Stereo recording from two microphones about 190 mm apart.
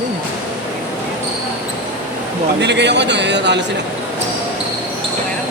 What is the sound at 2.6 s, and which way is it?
A man's voice, 65° right (ahead or behind).